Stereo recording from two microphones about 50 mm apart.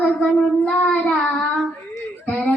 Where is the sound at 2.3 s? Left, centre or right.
Left.